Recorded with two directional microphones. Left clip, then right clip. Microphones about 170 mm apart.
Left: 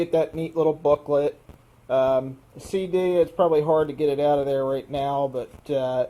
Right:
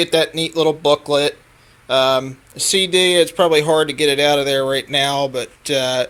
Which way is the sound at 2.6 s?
15° right (ahead or behind).